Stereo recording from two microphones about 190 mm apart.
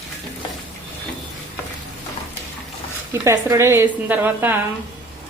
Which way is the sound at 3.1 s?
15° right (ahead or behind).